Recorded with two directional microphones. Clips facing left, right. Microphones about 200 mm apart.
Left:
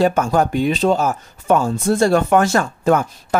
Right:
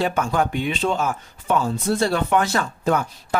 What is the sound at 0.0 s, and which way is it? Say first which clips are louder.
Speech: left 6 dB; 40° left (ahead or behind).